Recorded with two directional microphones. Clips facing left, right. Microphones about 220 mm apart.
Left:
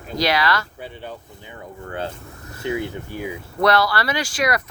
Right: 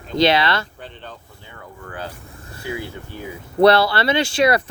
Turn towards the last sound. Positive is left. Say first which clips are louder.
# right 5 dB
turn(degrees=-30)  # may be behind; listen again after turning